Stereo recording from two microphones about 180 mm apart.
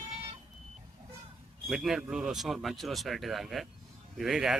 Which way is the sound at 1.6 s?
Centre (ahead or behind).